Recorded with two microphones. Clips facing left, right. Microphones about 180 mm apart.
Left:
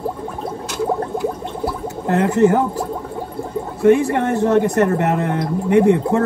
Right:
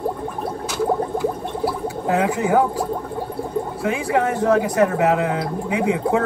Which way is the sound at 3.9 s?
10° right (ahead or behind).